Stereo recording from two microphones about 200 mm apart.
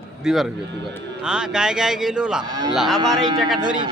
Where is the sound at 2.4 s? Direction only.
20° right (ahead or behind).